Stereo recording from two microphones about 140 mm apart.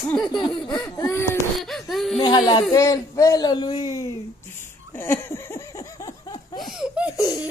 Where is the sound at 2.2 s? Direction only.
25° left (ahead or behind).